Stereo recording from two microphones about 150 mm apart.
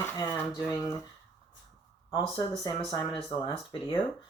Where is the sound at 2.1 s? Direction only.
30° left (ahead or behind).